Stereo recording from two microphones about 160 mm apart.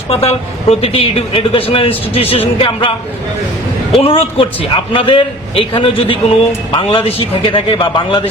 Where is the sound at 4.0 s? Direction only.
35° left (ahead or behind).